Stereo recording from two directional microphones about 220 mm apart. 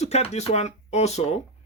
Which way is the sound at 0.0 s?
30° left (ahead or behind).